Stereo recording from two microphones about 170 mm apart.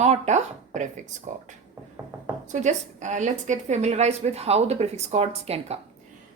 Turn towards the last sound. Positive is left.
turn(degrees=-40)  # may be behind; listen again after turning